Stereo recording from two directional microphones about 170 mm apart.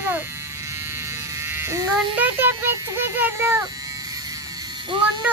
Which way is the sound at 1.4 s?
15° right (ahead or behind).